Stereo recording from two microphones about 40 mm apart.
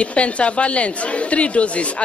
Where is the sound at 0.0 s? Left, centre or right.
Left.